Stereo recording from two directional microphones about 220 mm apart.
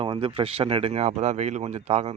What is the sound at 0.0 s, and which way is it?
Speech, 25° right (ahead or behind).